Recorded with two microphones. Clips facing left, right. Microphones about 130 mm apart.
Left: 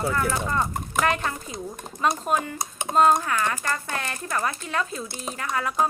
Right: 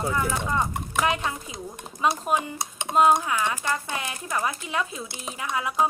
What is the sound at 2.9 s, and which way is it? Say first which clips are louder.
Speech: even; 10° right (ahead or behind).